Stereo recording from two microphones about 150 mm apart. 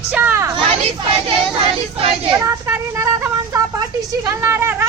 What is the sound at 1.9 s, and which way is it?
Speech, 40° right (ahead or behind).